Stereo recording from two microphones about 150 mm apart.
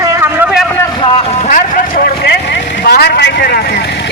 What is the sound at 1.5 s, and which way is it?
Vehicle, 70° left (ahead or behind).